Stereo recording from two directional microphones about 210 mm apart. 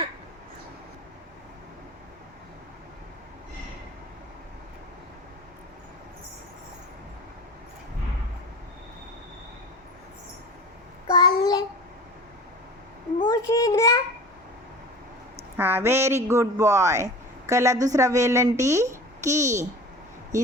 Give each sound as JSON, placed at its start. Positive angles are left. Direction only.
{"t": 11.1, "sound": "child singing", "side_deg": 20}
{"t": 13.2, "sound": "a sound", "side_deg": 15}
{"t": 15.5, "sound": "a man's voice", "side_deg": -10}